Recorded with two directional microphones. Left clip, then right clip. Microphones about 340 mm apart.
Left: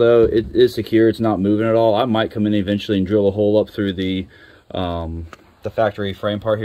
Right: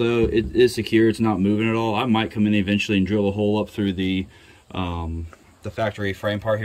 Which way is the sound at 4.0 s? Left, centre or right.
Left.